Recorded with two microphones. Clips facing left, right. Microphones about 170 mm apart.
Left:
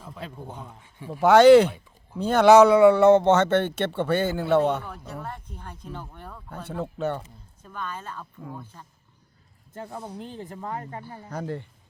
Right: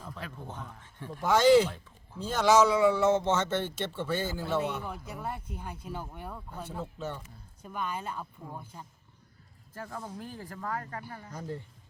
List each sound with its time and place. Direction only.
0.3 s speech: 15° left (ahead or behind)
1.2 s speech: 70° left (ahead or behind)
4.8 s speech: 10° right (ahead or behind)
6.7 s speech: 65° left (ahead or behind)
7.6 s speech: 10° right (ahead or behind)
9.7 s speech: 25° left (ahead or behind)
11.3 s speech: 70° left (ahead or behind)